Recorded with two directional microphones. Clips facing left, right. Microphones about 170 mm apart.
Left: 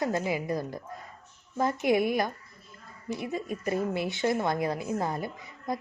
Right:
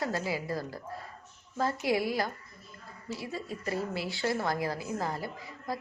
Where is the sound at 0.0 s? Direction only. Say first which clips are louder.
Left 4 dB; 20° left (ahead or behind).